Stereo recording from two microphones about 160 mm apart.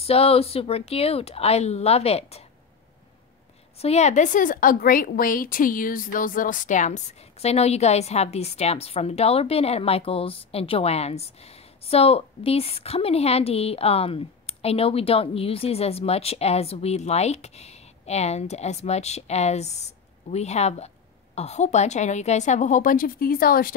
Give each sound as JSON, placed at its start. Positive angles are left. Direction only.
{"t": 0.0, "sound": "a woman's voice", "side_deg": 40}
{"t": 3.7, "sound": "a woman's voice", "side_deg": 40}